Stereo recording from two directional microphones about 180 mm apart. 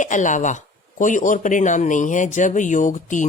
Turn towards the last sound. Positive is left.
turn(degrees=45)  # may be behind; listen again after turning